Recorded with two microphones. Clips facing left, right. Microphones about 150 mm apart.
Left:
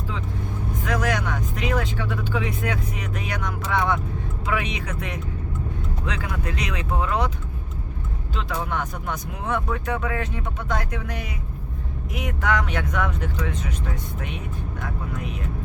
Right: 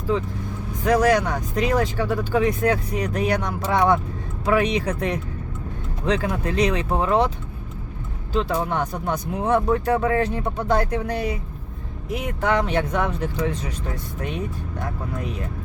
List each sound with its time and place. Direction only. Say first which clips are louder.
0.9 s speech: right 8 dB; 35° right (ahead or behind)
8.3 s speech: right 6 dB; 35° right (ahead or behind)